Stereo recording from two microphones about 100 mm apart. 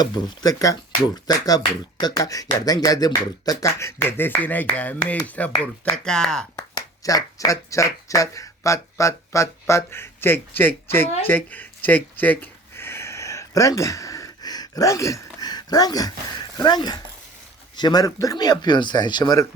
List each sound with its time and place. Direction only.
0.0 s speech: 40° left (ahead or behind); by 6.4 s 5° left (ahead or behind)
6.7 s speech: 40° left (ahead or behind); by 11.1 s 20° left (ahead or behind)
11.3 s a sound: 20° left (ahead or behind); by 16.1 s 40° left (ahead or behind)
16.6 s speech: 45° left (ahead or behind)